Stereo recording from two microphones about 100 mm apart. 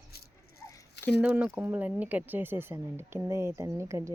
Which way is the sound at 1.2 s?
15° right (ahead or behind).